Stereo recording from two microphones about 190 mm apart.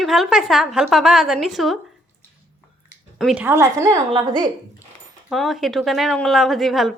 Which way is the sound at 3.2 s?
5° right (ahead or behind).